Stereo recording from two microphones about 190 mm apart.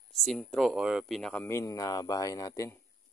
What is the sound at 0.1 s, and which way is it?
Speech, centre (ahead or behind).